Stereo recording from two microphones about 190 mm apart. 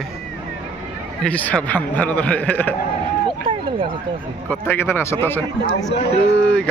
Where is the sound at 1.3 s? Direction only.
5° left (ahead or behind).